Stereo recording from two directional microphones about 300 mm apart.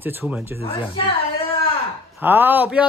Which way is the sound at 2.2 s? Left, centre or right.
Centre.